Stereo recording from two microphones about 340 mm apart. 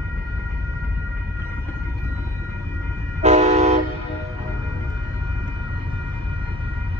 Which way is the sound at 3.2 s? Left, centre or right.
Centre.